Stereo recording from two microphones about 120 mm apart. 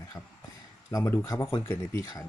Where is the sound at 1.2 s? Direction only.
30° left (ahead or behind).